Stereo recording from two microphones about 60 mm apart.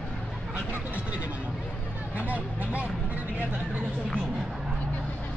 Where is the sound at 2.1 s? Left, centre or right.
Right.